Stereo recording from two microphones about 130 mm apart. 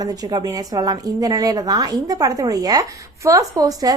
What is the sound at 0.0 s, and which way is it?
A woman's voice, 30° right (ahead or behind).